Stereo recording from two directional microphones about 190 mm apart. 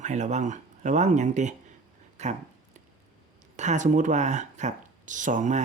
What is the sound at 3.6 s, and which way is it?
Speech, 40° right (ahead or behind).